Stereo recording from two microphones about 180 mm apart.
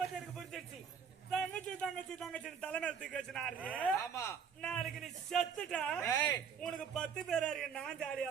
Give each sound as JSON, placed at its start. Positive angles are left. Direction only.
{"t": 1.3, "sound": "a man's voice", "side_deg": 5}
{"t": 4.6, "sound": "a man's voice", "side_deg": 0}
{"t": 6.1, "sound": "speech", "side_deg": 20}
{"t": 6.6, "sound": "a man's voice", "side_deg": 5}